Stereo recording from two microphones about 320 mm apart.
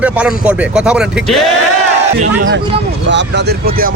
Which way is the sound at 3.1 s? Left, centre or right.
Right.